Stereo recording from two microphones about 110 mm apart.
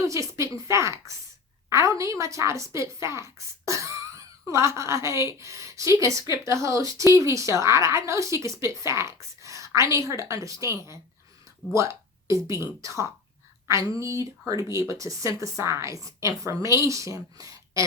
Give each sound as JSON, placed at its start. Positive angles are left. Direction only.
{"t": 0.1, "sound": "a woman's voice", "side_deg": -25}